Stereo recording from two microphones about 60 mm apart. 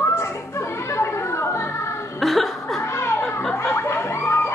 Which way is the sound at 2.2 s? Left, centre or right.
Centre.